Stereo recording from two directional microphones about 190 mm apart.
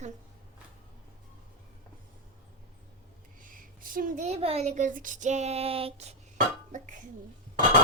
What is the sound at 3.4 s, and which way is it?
A woman's voice, 45° right (ahead or behind).